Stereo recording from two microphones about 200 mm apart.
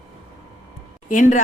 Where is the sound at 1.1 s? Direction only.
40° left (ahead or behind).